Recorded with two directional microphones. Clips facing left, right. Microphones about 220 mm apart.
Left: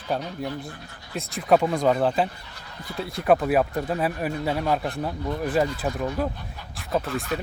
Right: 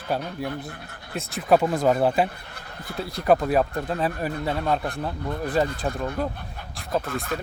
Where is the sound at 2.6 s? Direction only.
55° right (ahead or behind).